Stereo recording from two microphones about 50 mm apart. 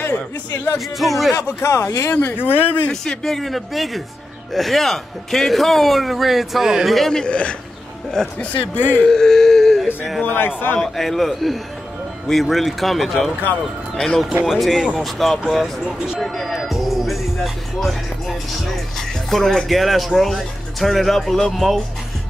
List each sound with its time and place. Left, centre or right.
0.7 s speech: centre
1.3 s speech: left
2.3 s speech: left
2.9 s speech: centre
7.2 s speech: left
8.4 s speech: left
9.0 s speech: centre
10.2 s speech: left
10.8 s speech: centre
13.9 s speech: centre
14.4 s speech: centre
16.2 s music: centre
18.9 s speech: centre